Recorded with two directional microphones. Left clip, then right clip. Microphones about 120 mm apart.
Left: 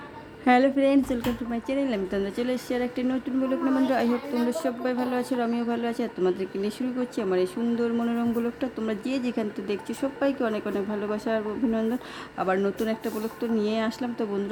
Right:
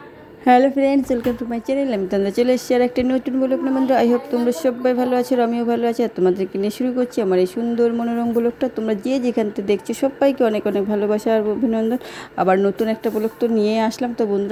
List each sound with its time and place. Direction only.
0.4 s speech: 30° right (ahead or behind); by 3.3 s 60° right (ahead or behind)
3.4 s a woman's voice: 40° right (ahead or behind)
7.9 s a woman's voice: 35° right (ahead or behind); by 14.3 s 55° right (ahead or behind)